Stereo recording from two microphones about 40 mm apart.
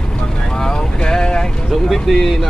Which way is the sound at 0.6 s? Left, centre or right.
Centre.